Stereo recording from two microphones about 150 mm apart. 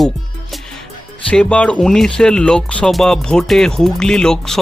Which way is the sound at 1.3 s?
5° left (ahead or behind).